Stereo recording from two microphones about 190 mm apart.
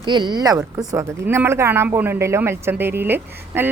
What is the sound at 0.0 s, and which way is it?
A woman's voice, 25° right (ahead or behind).